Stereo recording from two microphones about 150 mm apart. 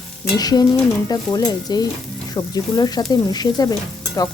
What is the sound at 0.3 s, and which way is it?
Speech, 25° left (ahead or behind).